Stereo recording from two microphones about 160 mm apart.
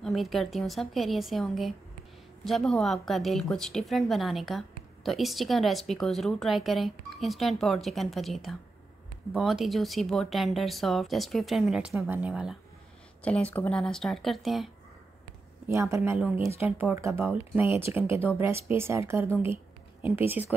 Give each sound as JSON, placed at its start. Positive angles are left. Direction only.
{"t": 0.0, "sound": "a woman's voice", "side_deg": 0}
{"t": 13.5, "sound": "a woman's voice", "side_deg": 10}
{"t": 15.7, "sound": "speech", "side_deg": -15}